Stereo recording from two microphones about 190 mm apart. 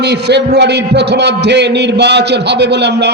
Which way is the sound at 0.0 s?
60° right (ahead or behind).